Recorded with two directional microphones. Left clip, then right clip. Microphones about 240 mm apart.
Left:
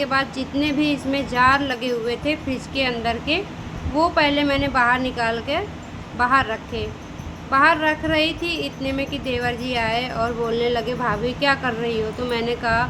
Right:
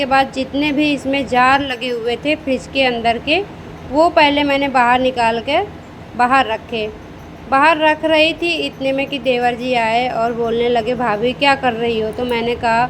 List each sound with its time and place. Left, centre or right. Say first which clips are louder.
0.0 s a woman's voice: right 7 dB; centre